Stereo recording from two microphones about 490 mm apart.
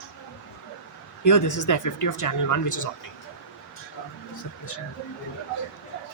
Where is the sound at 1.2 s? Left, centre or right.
Left.